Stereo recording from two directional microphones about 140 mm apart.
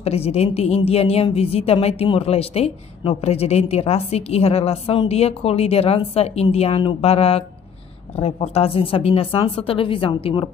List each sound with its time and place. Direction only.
0.0 s a woman's voice: 45° left (ahead or behind)